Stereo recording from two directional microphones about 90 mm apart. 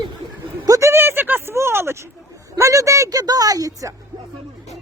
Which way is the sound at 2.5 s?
35° right (ahead or behind).